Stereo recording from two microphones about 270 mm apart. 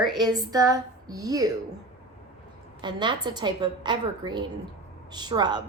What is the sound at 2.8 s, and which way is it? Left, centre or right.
A woman's voice, centre.